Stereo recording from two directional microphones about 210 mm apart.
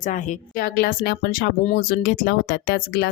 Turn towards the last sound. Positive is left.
turn(degrees=50)  # may be behind; listen again after turning